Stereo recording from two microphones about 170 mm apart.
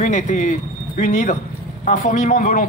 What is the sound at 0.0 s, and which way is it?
A man's voice, 50° left (ahead or behind).